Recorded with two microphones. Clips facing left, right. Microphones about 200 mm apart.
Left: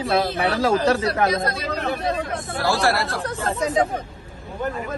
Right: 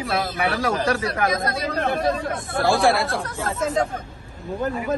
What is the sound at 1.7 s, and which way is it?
Speech, 50° right (ahead or behind).